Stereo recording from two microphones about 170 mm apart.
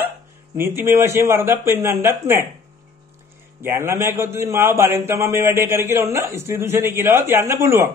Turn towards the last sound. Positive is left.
turn(degrees=-15)  # may be behind; listen again after turning